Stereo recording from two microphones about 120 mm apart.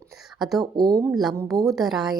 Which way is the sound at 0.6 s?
35° right (ahead or behind).